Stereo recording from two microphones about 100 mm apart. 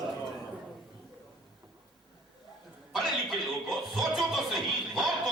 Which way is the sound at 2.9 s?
Centre (ahead or behind).